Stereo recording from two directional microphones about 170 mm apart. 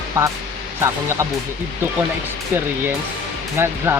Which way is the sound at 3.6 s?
15° right (ahead or behind).